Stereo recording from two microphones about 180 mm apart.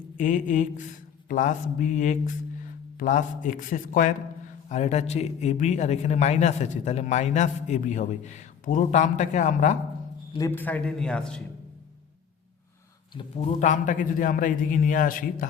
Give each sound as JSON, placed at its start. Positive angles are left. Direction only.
{"t": 0.2, "sound": "a man's voice", "side_deg": 45}
{"t": 10.3, "sound": "a man's voice", "side_deg": 15}
{"t": 13.1, "sound": "a man's voice", "side_deg": 40}